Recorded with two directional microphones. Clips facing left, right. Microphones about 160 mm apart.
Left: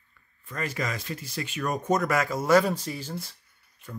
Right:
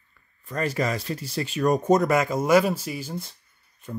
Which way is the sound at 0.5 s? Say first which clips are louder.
Right 6 dB; 35° right (ahead or behind).